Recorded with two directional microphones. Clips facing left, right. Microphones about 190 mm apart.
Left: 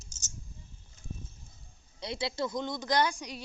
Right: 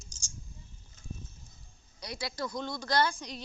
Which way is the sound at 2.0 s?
25° left (ahead or behind).